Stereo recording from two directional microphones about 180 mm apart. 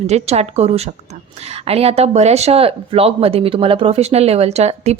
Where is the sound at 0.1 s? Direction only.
35° right (ahead or behind).